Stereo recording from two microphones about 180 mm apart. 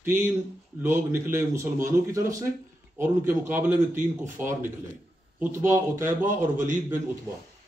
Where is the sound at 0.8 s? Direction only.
15° right (ahead or behind).